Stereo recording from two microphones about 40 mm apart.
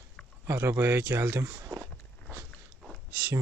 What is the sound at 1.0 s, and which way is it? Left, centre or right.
Speech, right.